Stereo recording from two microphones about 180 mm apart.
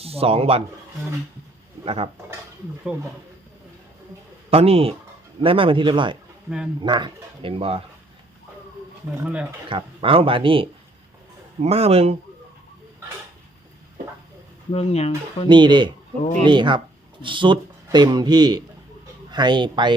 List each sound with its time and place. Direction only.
0.0 s speech: 35° right (ahead or behind)
1.8 s speech: 35° right (ahead or behind)
4.5 s a man's voice: 35° right (ahead or behind)
9.2 s speech: 5° right (ahead or behind)
9.6 s a man's voice: 30° right (ahead or behind)
14.7 s speech: 35° left (ahead or behind)
15.4 s a man's voice: 25° right (ahead or behind)